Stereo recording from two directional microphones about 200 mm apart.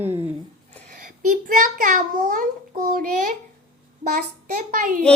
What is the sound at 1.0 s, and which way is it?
A child's voice, 45° right (ahead or behind).